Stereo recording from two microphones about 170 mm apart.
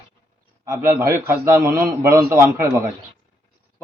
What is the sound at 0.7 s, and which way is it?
A man's voice, 15° right (ahead or behind).